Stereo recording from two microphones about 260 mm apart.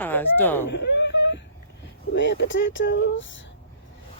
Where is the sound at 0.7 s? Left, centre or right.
Left.